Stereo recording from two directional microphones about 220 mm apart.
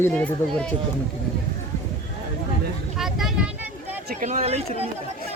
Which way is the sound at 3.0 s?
Centre (ahead or behind).